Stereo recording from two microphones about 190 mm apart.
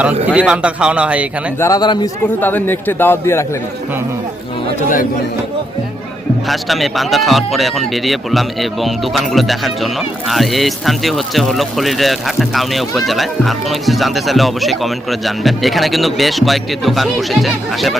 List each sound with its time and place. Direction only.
0.3 s speech: 5° right (ahead or behind)
1.5 s speech: 15° left (ahead or behind)
2.4 s a man's voice: 10° left (ahead or behind)
6.5 s speech: centre (ahead or behind)